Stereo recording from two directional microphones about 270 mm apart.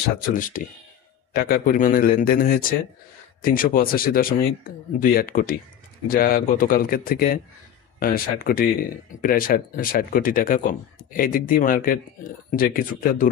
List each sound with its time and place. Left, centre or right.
0.3 s speech: left